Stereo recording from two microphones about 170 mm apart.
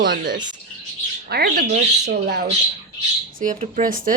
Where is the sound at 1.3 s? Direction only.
65° right (ahead or behind).